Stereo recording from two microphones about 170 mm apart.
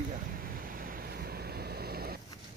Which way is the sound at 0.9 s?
65° right (ahead or behind).